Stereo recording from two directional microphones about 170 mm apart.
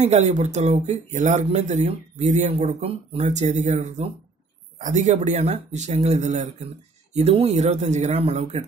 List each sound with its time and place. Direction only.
0.0 s speech: 40° right (ahead or behind)